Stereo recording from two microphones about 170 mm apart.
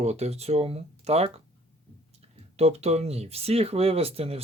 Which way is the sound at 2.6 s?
40° right (ahead or behind).